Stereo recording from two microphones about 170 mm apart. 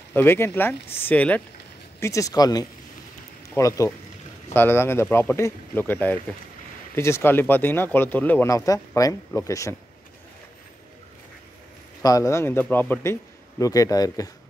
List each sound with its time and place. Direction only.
0.1 s a man's voice: 15° left (ahead or behind)
12.0 s a man's voice: 20° left (ahead or behind)